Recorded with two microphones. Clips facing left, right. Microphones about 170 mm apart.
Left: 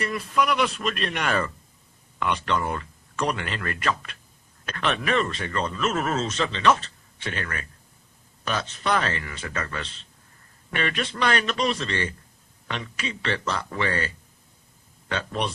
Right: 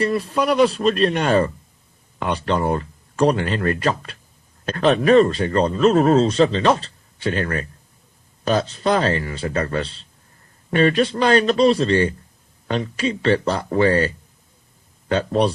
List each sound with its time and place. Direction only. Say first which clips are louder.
0.0 s speech: right 5 dB; 30° right (ahead or behind)
15.1 s speech: right 10 dB; 35° right (ahead or behind)